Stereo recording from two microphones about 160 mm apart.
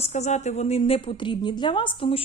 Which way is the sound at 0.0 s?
45° left (ahead or behind).